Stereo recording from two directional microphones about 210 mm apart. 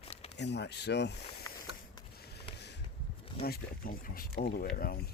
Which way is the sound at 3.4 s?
45° left (ahead or behind).